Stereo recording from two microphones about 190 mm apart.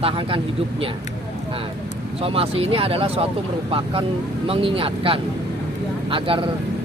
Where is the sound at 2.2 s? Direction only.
30° right (ahead or behind).